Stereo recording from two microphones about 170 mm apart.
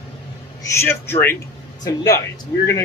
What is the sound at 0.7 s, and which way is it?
Speech, 15° left (ahead or behind).